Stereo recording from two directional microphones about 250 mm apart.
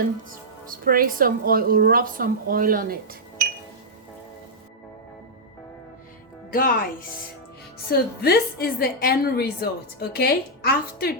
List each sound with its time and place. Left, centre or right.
0.3 s a woman's voice: right
6.5 s a woman's voice: left